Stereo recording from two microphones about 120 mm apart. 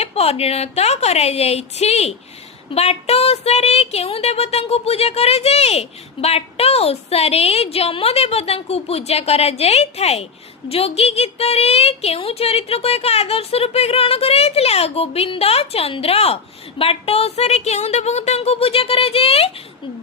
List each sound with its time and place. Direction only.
0.0 s a woman's voice: 55° left (ahead or behind)